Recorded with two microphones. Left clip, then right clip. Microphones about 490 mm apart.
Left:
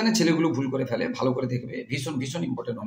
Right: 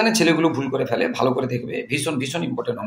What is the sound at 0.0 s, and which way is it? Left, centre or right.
Speech, left.